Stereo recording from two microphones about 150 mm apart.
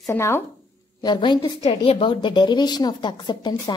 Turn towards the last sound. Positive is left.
turn(degrees=30)  # may be behind; listen again after turning